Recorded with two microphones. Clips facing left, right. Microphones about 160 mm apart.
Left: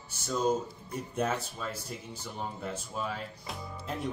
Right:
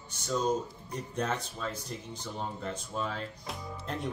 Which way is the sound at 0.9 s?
5° left (ahead or behind).